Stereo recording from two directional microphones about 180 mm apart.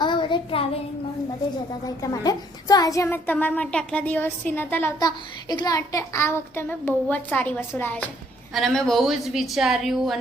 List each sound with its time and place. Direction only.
0.0 s child singing: 25° left (ahead or behind)
2.0 s a child's voice: 20° left (ahead or behind); by 10.2 s centre (ahead or behind)